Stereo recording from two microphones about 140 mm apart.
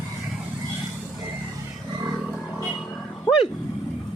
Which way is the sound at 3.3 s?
30° left (ahead or behind).